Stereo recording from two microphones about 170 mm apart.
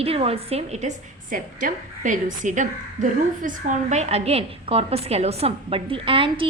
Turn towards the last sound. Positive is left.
turn(degrees=-30)  # may be behind; listen again after turning